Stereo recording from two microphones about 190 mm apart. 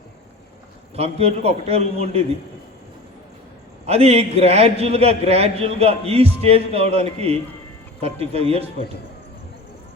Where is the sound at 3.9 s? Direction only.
35° right (ahead or behind).